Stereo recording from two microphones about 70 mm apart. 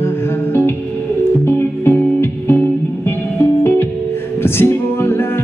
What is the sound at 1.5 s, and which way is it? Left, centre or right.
Music, left.